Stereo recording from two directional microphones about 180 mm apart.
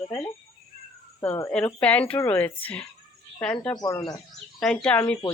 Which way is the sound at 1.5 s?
5° left (ahead or behind).